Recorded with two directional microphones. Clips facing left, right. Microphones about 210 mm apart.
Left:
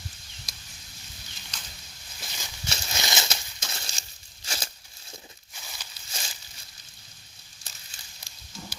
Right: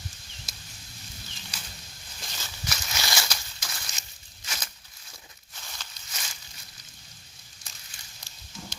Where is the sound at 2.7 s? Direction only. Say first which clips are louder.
Left 1 dB; 25° left (ahead or behind).